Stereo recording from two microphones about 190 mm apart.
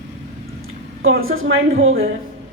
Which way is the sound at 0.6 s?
90° right.